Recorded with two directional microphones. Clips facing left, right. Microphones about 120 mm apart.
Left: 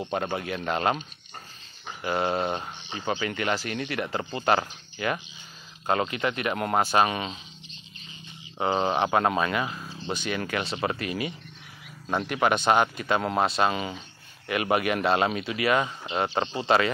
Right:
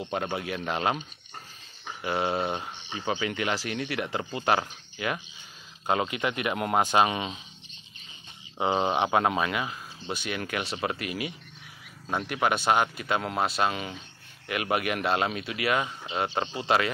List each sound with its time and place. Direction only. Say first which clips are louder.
0.1 s speech: left 1 dB; centre (ahead or behind)
2.0 s speech: left 2 dB; 5° right (ahead or behind)
8.5 s speech: left 1 dB; 10° right (ahead or behind)